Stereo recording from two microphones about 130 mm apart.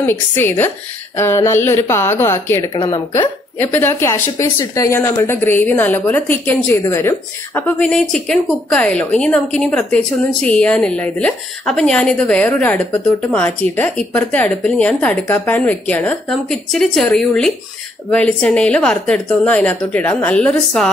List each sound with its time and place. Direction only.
0.0 s a woman's voice: 15° left (ahead or behind)